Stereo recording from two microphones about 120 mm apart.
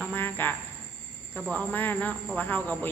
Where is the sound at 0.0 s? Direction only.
15° left (ahead or behind).